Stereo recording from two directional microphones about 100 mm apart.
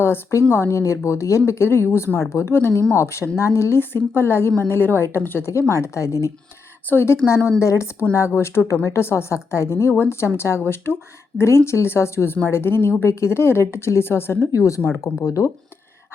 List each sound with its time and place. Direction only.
0.0 s a woman's voice: 25° left (ahead or behind)